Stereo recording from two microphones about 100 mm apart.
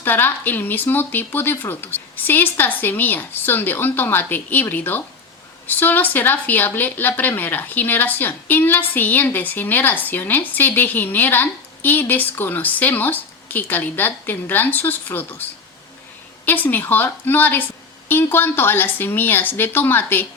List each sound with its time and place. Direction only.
0.0 s a woman's voice: 20° left (ahead or behind)
16.5 s a woman's voice: 20° left (ahead or behind)